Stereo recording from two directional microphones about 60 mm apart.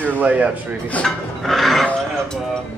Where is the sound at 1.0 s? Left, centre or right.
Centre.